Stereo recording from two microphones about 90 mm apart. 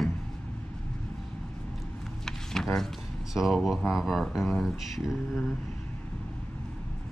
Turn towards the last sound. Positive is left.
turn(degrees=0)  # may be behind; listen again after turning